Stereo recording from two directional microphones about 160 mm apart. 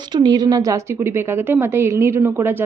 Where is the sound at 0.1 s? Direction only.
25° right (ahead or behind).